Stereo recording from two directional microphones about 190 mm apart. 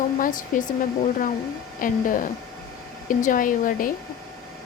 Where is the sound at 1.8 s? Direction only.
45° left (ahead or behind).